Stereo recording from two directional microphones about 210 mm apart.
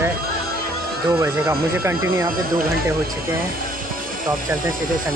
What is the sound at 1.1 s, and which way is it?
Speech, 10° right (ahead or behind).